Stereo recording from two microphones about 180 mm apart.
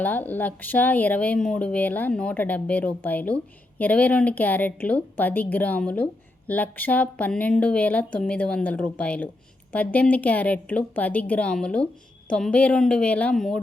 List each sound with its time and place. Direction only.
0.0 s a woman's voice: 10° left (ahead or behind)